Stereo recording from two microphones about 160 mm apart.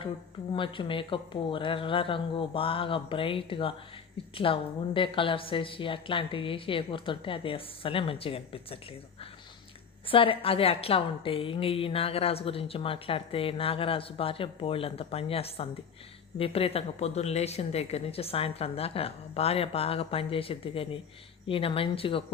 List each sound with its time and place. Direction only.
0.5 s a woman's voice: 30° left (ahead or behind)
10.1 s a woman's voice: 35° left (ahead or behind)